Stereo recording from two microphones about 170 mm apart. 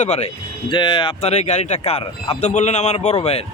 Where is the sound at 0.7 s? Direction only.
25° left (ahead or behind).